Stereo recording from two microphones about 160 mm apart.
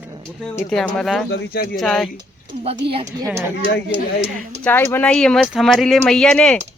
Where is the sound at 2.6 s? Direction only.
35° right (ahead or behind).